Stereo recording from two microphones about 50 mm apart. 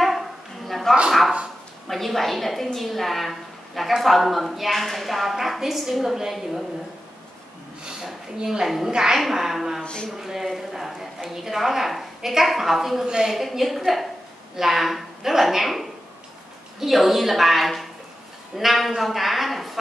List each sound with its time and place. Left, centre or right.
0.0 s bow-wow: centre
1.9 s a woman's voice: centre
8.0 s a woman's voice: centre
13.0 s a woman's voice: centre
13.3 s a woman's voice: centre